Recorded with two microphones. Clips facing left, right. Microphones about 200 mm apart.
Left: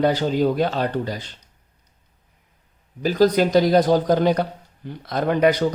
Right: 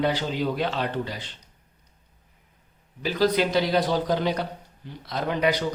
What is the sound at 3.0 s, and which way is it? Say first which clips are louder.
Speech: left 5 dB; 45° left (ahead or behind).